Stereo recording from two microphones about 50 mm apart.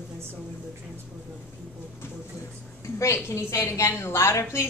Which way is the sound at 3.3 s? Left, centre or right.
Left.